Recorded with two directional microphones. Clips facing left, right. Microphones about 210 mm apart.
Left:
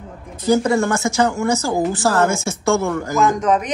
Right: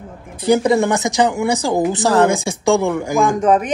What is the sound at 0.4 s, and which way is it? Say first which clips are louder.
Speech: right 2 dB; 15° right (ahead or behind).